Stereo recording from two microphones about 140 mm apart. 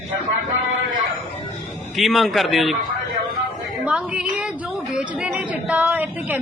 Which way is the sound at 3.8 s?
10° right (ahead or behind).